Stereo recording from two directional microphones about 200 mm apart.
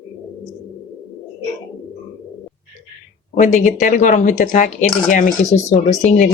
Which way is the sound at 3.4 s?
40° left (ahead or behind).